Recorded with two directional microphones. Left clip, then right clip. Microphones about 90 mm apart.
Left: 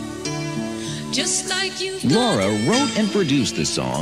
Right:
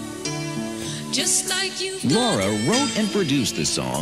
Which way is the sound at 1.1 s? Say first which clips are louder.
Left 1 dB; 40° left (ahead or behind).